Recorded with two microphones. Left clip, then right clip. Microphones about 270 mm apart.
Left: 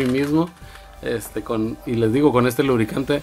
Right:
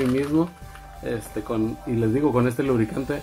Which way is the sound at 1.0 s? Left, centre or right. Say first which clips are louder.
Left 4 dB; left.